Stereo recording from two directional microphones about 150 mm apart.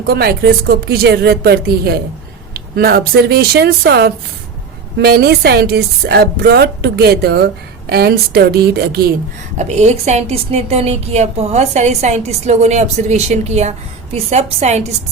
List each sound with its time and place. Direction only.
0.1 s a woman's voice: 90° right
9.6 s a woman's voice: 50° right (ahead or behind)